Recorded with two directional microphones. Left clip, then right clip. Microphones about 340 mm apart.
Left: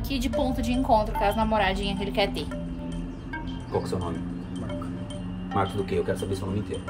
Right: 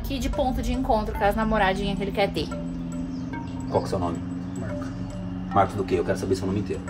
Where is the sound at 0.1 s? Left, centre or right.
Centre.